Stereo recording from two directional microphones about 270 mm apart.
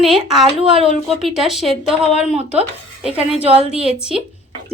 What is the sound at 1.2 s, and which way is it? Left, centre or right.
Speech, centre.